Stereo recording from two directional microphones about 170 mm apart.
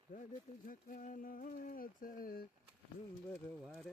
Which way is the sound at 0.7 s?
55° left (ahead or behind).